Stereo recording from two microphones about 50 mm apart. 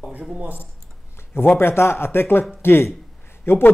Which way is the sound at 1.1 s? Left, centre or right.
Left.